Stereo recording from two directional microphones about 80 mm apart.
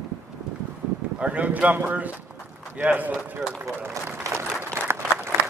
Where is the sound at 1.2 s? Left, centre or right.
Centre.